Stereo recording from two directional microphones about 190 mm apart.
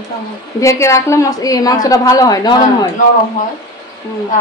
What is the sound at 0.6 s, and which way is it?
A woman's voice, 15° left (ahead or behind).